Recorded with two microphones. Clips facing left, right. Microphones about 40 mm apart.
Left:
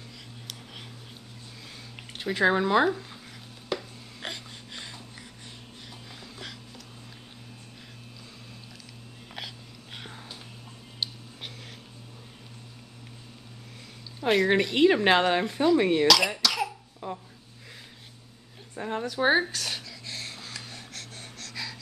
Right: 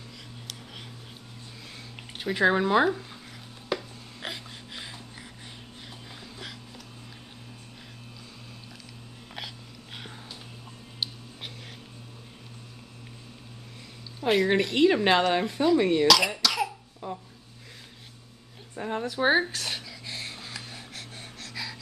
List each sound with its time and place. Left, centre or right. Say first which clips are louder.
2.0 s speech: even; centre
4.2 s a sound: even; centre
9.9 s a sound: even; centre
11.0 s music: even; centre
14.2 s speech: even; centre
16.1 s cough: even; centre
18.8 s a woman's voice: even; centre
19.5 s wheeze: even; centre